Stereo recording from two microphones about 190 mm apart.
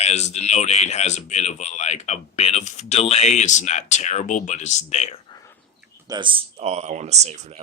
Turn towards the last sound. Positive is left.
turn(degrees=-35)  # may be behind; listen again after turning